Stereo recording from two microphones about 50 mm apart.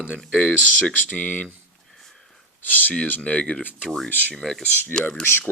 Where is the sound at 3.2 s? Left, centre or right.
Left.